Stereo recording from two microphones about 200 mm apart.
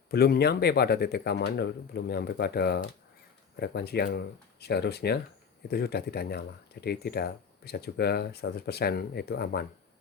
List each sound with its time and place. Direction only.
0.1 s speech: 50° left (ahead or behind)